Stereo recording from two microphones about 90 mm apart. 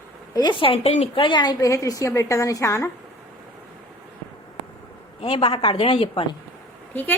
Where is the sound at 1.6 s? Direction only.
40° left (ahead or behind).